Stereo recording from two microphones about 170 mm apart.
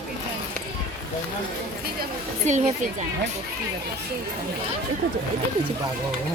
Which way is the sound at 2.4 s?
45° right (ahead or behind).